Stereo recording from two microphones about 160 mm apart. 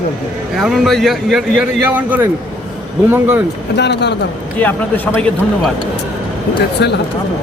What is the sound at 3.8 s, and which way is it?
Speech, 90° left.